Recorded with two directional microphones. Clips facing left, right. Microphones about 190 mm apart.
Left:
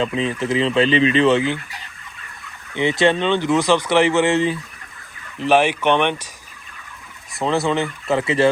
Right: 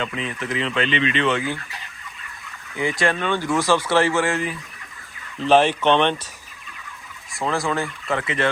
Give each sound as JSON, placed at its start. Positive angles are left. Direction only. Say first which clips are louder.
{"t": 0.0, "sound": "speech", "louder": "left 6 dB", "side_deg": 30}
{"t": 2.7, "sound": "speech", "louder": "left 5 dB", "side_deg": 25}
{"t": 5.4, "sound": "speech", "louder": "even", "side_deg": 10}
{"t": 7.4, "sound": "speech", "louder": "left 4 dB", "side_deg": 25}